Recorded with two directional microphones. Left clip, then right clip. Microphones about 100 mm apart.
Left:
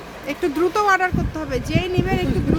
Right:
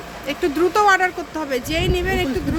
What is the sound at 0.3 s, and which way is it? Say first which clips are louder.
Speech: right 1 dB; centre (ahead or behind).